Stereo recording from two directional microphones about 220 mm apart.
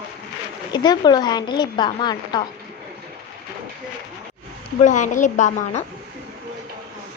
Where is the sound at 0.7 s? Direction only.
20° left (ahead or behind).